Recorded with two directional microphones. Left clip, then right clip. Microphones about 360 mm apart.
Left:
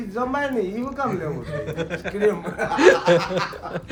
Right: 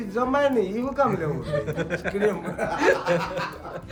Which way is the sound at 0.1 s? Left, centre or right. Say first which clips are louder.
Right 2 dB; centre.